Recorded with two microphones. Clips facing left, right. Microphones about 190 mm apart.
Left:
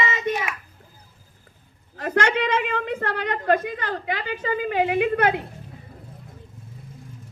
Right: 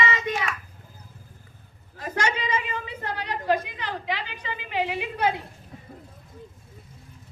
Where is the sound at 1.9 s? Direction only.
70° left (ahead or behind).